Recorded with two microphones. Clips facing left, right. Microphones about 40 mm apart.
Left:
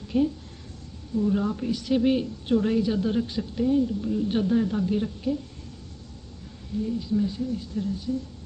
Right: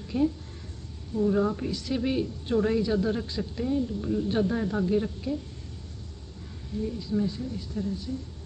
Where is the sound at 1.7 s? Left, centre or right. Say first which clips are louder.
Left 6 dB; left.